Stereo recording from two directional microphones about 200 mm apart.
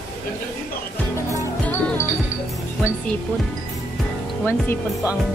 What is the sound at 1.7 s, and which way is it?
Music, 10° left (ahead or behind).